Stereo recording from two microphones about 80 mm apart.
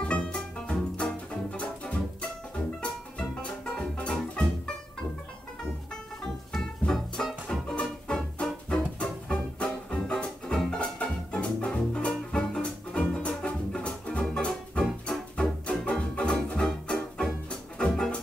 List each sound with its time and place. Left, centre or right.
0.0 s music: centre
3.7 s music: centre
6.5 s music: centre